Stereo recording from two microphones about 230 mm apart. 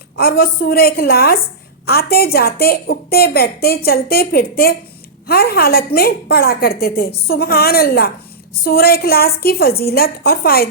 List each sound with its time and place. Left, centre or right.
0.2 s a woman's voice: left